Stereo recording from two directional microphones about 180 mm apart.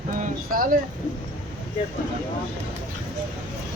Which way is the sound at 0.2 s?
50° right (ahead or behind).